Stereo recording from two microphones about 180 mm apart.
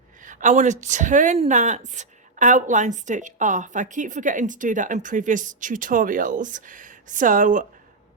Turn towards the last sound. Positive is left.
turn(degrees=-45)  # may be behind; listen again after turning